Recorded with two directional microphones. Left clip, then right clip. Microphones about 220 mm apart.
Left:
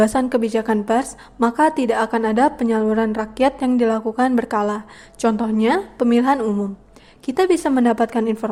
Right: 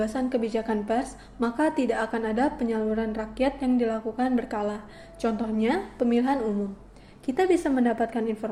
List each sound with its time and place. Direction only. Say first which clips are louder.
0.0 s a woman's voice: left 10 dB; 50° left (ahead or behind)